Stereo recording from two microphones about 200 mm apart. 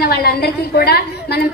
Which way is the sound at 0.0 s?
50° left (ahead or behind).